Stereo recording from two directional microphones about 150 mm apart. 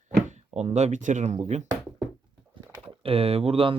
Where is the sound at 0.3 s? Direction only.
50° right (ahead or behind).